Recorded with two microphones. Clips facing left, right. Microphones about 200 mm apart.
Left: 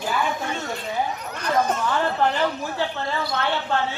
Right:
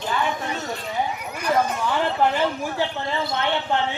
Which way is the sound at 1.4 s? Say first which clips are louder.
Even; 10° right (ahead or behind).